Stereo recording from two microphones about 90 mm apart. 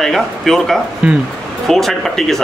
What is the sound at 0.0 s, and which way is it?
Speech, 5° left (ahead or behind).